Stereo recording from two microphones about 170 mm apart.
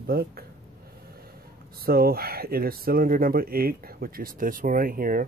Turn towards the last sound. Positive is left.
turn(degrees=-55)  # may be behind; listen again after turning